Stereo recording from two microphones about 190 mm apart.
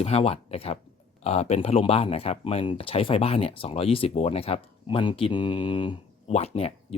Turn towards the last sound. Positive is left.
turn(degrees=30)  # may be behind; listen again after turning